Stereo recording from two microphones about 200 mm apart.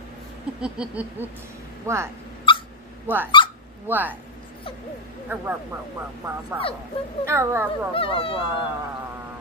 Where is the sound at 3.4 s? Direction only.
25° left (ahead or behind).